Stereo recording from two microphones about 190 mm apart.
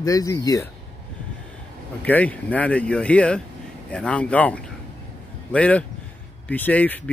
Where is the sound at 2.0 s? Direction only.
10° left (ahead or behind).